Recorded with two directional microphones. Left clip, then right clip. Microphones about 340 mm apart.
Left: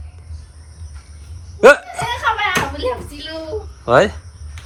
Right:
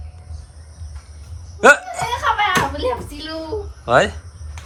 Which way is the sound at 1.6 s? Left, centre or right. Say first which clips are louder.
Left 2 dB; centre.